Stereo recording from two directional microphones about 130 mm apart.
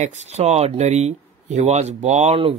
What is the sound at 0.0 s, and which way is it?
Speech, 60° right (ahead or behind).